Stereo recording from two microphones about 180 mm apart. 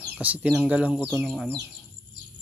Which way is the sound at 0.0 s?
10° right (ahead or behind).